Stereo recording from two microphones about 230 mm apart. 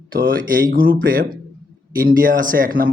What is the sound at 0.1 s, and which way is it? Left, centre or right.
A man's voice, right.